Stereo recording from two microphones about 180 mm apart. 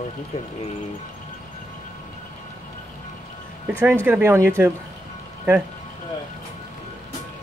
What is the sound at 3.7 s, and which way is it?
Speech, 10° right (ahead or behind).